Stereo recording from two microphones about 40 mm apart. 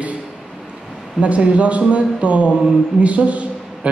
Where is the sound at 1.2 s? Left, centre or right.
Right.